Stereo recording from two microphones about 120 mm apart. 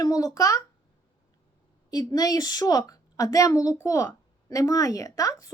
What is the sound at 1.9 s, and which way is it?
A woman's voice, 30° left (ahead or behind).